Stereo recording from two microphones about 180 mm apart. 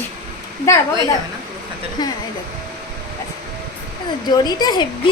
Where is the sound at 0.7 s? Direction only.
15° left (ahead or behind).